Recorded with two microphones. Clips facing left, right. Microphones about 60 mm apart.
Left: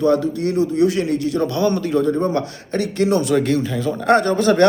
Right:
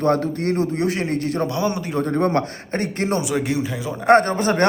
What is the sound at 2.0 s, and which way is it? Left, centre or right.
Speech, right.